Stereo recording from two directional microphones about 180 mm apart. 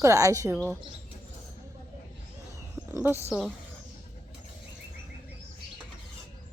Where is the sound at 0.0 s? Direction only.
15° right (ahead or behind).